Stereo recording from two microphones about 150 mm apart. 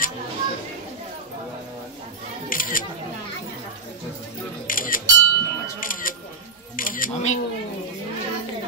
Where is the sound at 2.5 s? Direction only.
65° left (ahead or behind).